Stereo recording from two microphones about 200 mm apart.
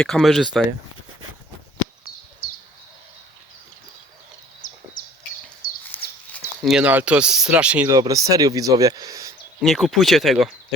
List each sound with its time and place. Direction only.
0.0 s speech: centre (ahead or behind)
4.6 s bird: 40° left (ahead or behind)
5.6 s a sound: 45° left (ahead or behind)
6.3 s speech: centre (ahead or behind)
7.9 s speech: 15° right (ahead or behind)
9.6 s speech: centre (ahead or behind)